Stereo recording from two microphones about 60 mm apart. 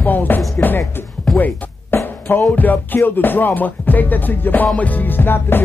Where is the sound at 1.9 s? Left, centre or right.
Left.